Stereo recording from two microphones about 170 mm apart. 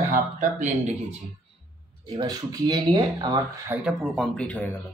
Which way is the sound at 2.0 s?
25° right (ahead or behind).